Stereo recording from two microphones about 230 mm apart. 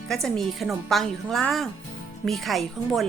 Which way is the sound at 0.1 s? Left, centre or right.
Centre.